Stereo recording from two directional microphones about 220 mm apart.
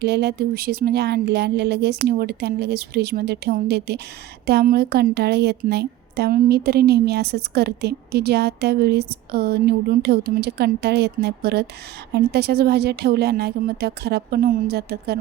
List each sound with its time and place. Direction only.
0.0 s a woman's voice: 50° right (ahead or behind)